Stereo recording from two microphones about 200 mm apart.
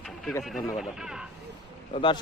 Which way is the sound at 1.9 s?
25° left (ahead or behind).